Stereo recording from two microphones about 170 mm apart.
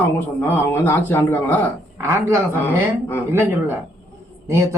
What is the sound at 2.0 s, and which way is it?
Speech, 15° right (ahead or behind).